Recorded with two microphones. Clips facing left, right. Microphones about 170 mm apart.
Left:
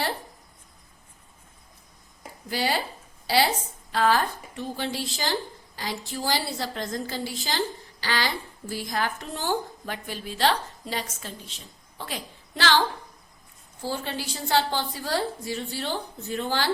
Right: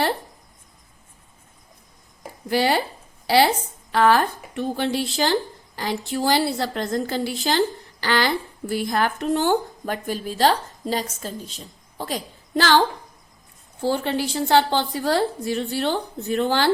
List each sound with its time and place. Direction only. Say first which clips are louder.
2.5 s speech: right 7 dB; 65° right (ahead or behind)
3.9 s a woman's voice: right 5 dB; 65° right (ahead or behind); by 12.8 s 45° right (ahead or behind)
13.8 s speech: right 8 dB; 70° right (ahead or behind)